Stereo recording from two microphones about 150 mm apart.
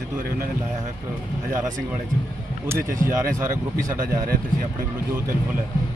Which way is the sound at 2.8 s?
60° right (ahead or behind).